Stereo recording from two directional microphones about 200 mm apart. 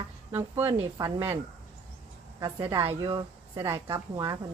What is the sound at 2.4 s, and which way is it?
A woman's voice, 20° right (ahead or behind).